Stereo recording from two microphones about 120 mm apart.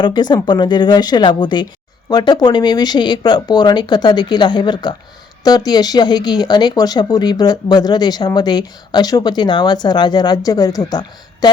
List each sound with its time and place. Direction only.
0.0 s speech: 35° left (ahead or behind)